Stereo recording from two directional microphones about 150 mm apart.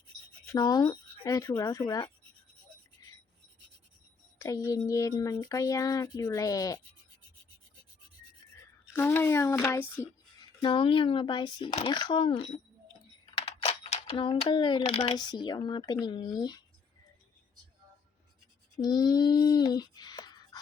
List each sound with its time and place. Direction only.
0.4 s speech: 25° left (ahead or behind)
1.8 s speech: 30° left (ahead or behind)
4.4 s speech: 20° left (ahead or behind)
8.9 s speech: 15° left (ahead or behind)
10.6 s speech: 35° left (ahead or behind)
13.3 s a sound: 40° left (ahead or behind)
14.8 s speech: 40° left (ahead or behind)
15.2 s speech: 30° left (ahead or behind)
18.8 s a sound: 25° left (ahead or behind)